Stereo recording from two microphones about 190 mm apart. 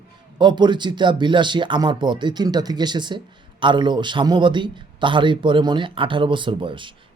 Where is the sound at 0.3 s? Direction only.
25° right (ahead or behind).